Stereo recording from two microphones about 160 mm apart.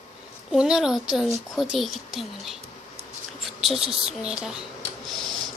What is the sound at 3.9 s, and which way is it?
Speech, 5° right (ahead or behind).